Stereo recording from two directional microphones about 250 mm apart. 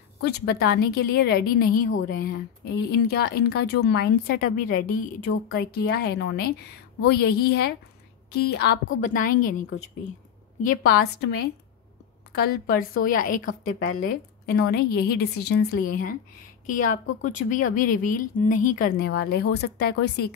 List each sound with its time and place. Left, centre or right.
0.2 s speech: left